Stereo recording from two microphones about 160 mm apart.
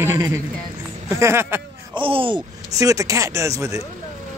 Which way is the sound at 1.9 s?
35° right (ahead or behind).